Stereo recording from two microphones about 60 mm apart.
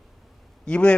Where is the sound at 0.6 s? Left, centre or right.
Centre.